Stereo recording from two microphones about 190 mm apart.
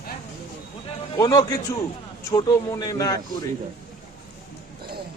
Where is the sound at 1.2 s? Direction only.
20° left (ahead or behind).